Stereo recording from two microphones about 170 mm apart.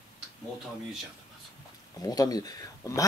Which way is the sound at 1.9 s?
20° left (ahead or behind).